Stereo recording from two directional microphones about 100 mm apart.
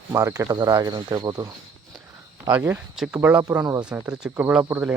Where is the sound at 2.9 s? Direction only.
5° right (ahead or behind).